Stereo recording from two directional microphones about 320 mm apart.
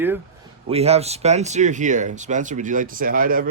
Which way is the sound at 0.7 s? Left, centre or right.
Centre.